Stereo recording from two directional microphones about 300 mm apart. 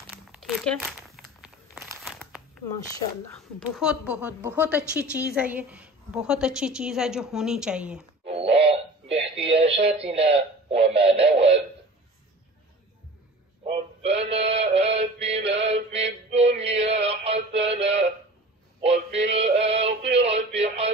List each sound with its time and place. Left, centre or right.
0.1 s crumpling: centre
3.5 s a woman's voice: centre
8.3 s music: centre
9.4 s speech: centre
13.7 s synthetic singing: centre
16.3 s music: centre
18.8 s male singing: centre